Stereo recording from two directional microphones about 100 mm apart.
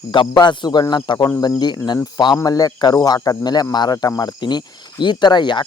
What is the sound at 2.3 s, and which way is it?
Speech, 40° left (ahead or behind).